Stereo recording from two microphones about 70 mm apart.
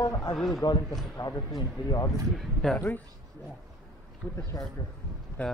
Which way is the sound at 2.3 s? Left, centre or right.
Centre.